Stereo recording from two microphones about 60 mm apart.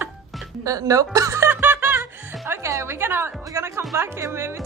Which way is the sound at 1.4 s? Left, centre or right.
Right.